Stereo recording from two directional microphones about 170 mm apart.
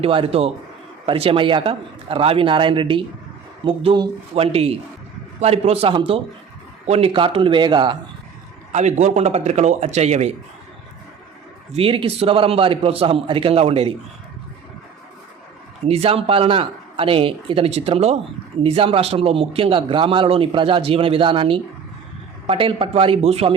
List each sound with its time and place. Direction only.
0.0 s a man's voice: 35° right (ahead or behind)
8.7 s a man's voice: 40° right (ahead or behind)
11.7 s a man's voice: 35° right (ahead or behind)
15.9 s a man's voice: 35° right (ahead or behind)